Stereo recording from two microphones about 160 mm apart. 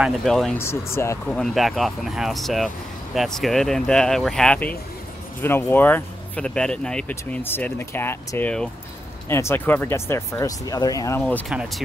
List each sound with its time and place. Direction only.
0.0 s speech: centre (ahead or behind)
0.6 s speech: 15° left (ahead or behind)
1.2 s speech: 5° left (ahead or behind)
11.4 s speech: centre (ahead or behind)